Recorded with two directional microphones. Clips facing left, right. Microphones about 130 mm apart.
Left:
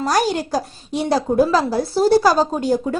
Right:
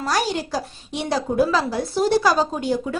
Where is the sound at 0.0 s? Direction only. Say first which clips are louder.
Left 4 dB; 45° left (ahead or behind).